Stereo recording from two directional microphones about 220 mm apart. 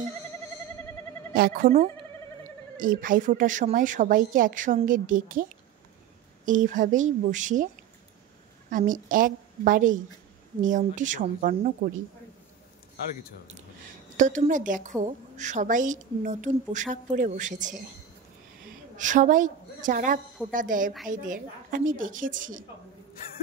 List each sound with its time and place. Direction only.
1.3 s speech: 40° right (ahead or behind)
2.8 s a woman's voice: 40° right (ahead or behind)
14.1 s a woman's voice: 35° right (ahead or behind)
18.9 s a woman's voice: 35° right (ahead or behind)